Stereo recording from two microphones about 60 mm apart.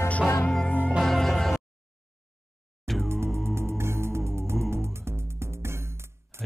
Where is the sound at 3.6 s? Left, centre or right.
Right.